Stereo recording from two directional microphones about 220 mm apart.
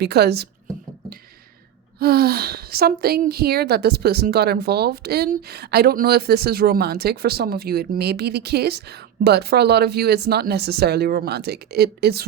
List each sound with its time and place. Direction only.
0.0 s a woman's voice: 45° right (ahead or behind)
2.0 s a woman's voice: 45° right (ahead or behind)